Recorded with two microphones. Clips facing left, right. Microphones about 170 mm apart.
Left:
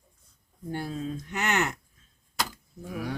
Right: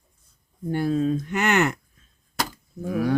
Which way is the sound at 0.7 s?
75° right (ahead or behind).